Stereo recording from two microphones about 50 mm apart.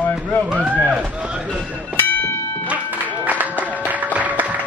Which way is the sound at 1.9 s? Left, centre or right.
Left.